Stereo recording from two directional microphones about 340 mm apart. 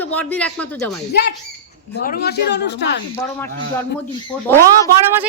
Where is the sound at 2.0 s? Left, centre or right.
Left.